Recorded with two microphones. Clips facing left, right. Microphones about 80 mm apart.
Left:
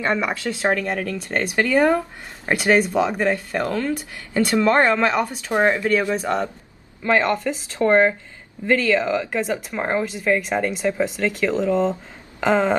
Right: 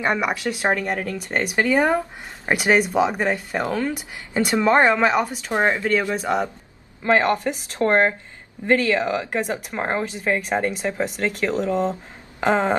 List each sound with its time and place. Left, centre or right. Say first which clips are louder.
0.0 s speech: even; centre
6.2 s speech: even; centre
7.1 s speech: right 1 dB; right